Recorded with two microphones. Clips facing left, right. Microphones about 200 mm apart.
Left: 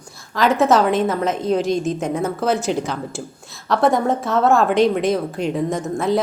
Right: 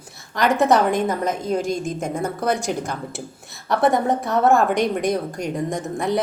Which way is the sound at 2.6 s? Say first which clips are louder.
Left 3 dB; 10° right (ahead or behind).